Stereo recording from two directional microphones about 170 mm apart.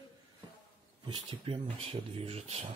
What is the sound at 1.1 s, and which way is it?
Speech, 30° right (ahead or behind).